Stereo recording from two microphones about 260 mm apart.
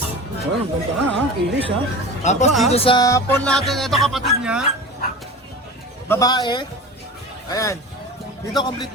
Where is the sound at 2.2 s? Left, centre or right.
Left; by 4.7 s centre.